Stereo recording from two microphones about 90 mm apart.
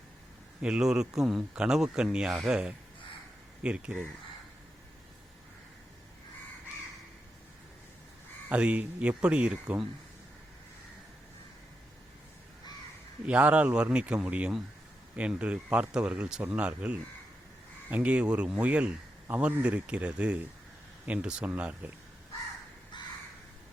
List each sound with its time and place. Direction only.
0.6 s a man's voice: 10° right (ahead or behind)
8.4 s a man's voice: 15° right (ahead or behind)
13.2 s a man's voice: 15° right (ahead or behind)